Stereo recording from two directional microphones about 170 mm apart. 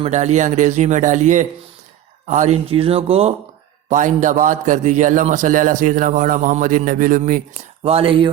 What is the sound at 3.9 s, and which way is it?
A man's voice, 45° right (ahead or behind).